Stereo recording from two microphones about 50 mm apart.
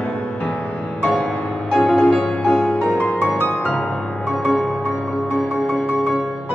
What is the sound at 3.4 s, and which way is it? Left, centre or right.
Music, left.